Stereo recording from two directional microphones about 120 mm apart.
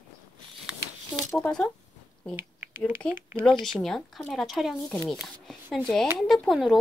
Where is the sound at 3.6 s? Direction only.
5° left (ahead or behind).